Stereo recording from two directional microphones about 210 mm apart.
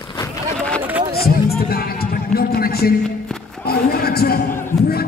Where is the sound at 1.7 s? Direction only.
45° left (ahead or behind).